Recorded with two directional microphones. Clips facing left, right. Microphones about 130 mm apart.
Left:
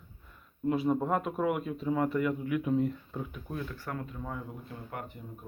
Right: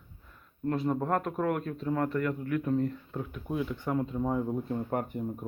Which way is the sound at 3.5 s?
15° right (ahead or behind).